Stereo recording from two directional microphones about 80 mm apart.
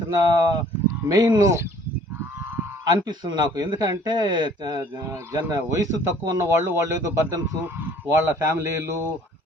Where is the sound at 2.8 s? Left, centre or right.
Right.